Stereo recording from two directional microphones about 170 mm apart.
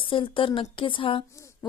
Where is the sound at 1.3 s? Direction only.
20° left (ahead or behind).